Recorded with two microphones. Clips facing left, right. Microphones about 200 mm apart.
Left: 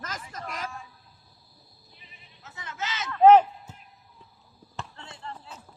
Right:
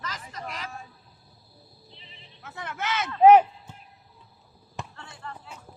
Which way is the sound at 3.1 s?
15° right (ahead or behind).